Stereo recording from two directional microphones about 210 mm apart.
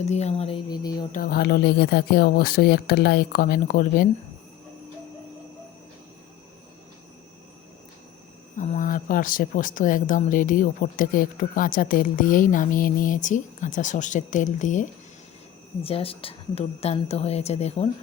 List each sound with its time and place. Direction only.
0.0 s a woman's voice: 30° left (ahead or behind)
1.1 s speech: 45° left (ahead or behind)
8.5 s a woman's voice: 35° left (ahead or behind)